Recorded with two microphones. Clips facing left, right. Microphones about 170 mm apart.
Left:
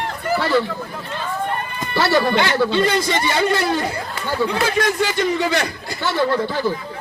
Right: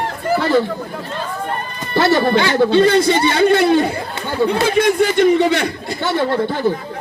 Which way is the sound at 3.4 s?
60° right (ahead or behind).